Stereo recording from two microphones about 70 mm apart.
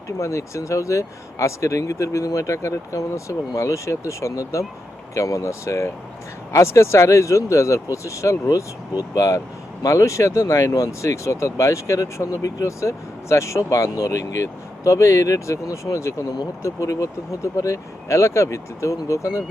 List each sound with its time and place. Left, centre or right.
0.2 s speech: left